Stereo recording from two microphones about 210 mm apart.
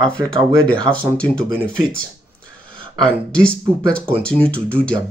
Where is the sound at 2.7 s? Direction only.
25° right (ahead or behind).